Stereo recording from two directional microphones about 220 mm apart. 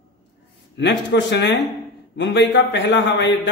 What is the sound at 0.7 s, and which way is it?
A man's voice, 55° left (ahead or behind).